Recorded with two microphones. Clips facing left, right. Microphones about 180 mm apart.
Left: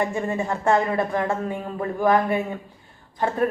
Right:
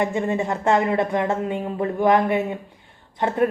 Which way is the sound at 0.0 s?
20° right (ahead or behind).